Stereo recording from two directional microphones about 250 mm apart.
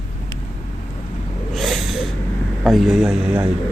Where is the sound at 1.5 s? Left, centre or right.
Centre.